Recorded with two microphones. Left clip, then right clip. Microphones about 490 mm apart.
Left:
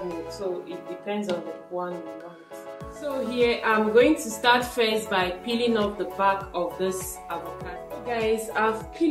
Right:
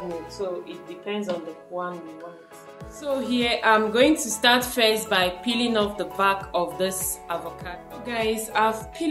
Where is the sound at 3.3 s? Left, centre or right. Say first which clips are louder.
Right 2 dB; right.